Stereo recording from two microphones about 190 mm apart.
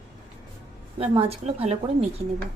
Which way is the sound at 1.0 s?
30° right (ahead or behind).